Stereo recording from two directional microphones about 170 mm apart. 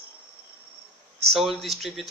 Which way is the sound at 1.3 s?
Centre (ahead or behind).